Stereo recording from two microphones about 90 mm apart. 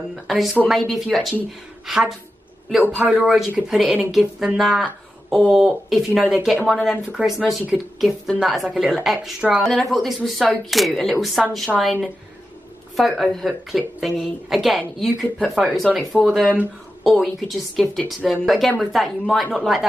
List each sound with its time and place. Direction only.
0.1 s speech: centre (ahead or behind)
2.8 s a man's voice: 20° right (ahead or behind)
3.2 s speech: 5° right (ahead or behind)